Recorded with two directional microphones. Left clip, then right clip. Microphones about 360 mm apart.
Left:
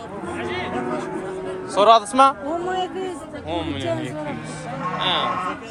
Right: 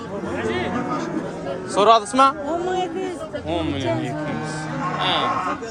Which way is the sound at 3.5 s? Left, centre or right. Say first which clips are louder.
Right 1 dB; centre.